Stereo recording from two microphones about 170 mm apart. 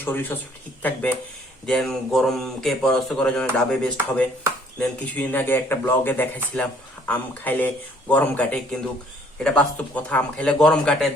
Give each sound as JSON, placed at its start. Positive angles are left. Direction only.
{"t": 0.0, "sound": "a man's voice", "side_deg": 10}